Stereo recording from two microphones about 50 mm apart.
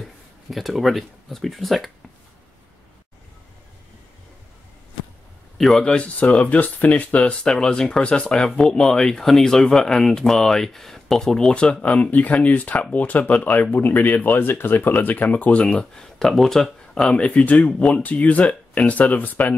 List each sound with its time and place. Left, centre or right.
0.0 s speech: centre
5.8 s speech: left
7.4 s speech: centre; by 15.7 s left
15.7 s speech: centre
17.1 s speech: left